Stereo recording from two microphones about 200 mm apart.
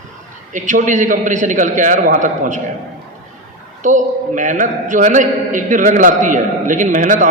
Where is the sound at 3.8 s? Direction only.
40° right (ahead or behind).